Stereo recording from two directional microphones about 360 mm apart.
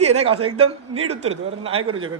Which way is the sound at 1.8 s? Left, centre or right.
Right.